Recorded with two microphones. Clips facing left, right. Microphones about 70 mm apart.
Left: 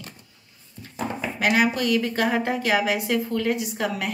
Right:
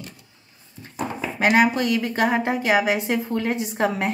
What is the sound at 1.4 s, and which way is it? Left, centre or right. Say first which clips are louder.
A woman's voice: right 3 dB; right.